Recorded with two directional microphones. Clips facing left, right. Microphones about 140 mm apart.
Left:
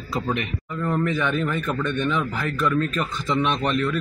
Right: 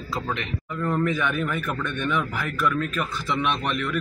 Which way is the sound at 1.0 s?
10° right (ahead or behind).